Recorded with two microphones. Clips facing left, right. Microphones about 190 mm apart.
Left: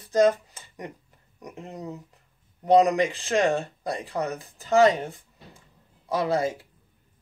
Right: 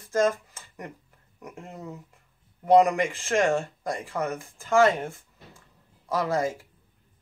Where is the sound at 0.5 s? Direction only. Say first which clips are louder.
Left 2 dB; 20° left (ahead or behind).